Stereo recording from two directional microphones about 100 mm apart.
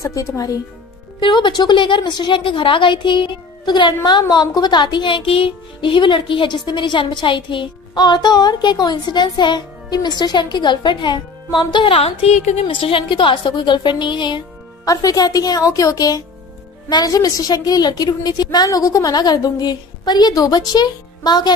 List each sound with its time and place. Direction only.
0.0 s a woman's voice: 35° left (ahead or behind)
1.2 s a child's voice: 55° left (ahead or behind)
14.9 s a woman's voice: 35° left (ahead or behind)